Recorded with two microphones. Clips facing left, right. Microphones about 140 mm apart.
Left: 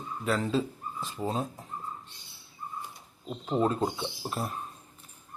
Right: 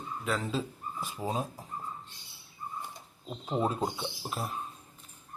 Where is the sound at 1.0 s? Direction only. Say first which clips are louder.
Left 2 dB; 10° right (ahead or behind).